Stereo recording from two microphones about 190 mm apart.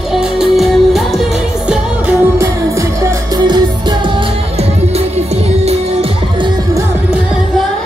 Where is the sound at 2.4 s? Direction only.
15° right (ahead or behind); by 6.5 s 30° right (ahead or behind).